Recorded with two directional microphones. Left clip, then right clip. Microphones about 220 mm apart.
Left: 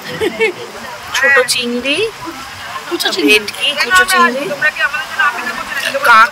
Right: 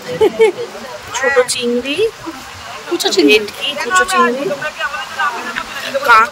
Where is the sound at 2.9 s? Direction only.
50° right (ahead or behind).